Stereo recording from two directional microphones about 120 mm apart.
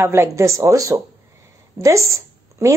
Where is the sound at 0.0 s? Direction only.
20° right (ahead or behind).